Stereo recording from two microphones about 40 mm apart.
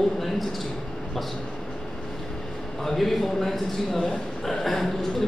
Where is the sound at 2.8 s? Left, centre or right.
Centre.